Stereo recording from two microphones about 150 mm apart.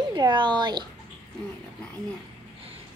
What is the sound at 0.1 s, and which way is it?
Speech, 30° right (ahead or behind).